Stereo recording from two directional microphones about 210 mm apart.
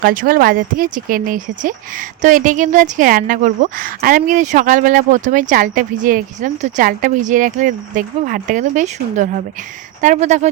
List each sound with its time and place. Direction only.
0.0 s speech: 40° right (ahead or behind)